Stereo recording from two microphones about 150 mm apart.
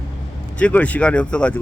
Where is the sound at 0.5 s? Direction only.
10° left (ahead or behind).